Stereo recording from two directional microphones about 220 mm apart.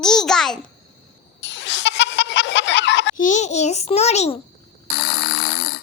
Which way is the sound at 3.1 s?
35° left (ahead or behind).